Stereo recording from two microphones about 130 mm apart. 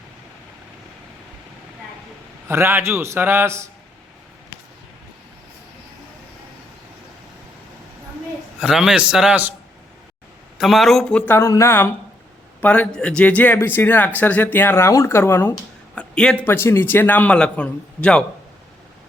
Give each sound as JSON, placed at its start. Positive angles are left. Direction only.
{"t": 2.5, "sound": "a man's voice", "side_deg": -20}
{"t": 8.6, "sound": "a man's voice", "side_deg": -5}
{"t": 10.6, "sound": "a man's voice", "side_deg": 0}
{"t": 11.3, "sound": "a man's voice", "side_deg": 20}
{"t": 16.0, "sound": "a man's voice", "side_deg": 5}